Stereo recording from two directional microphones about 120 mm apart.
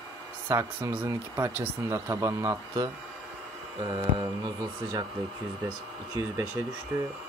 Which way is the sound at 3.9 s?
35° right (ahead or behind).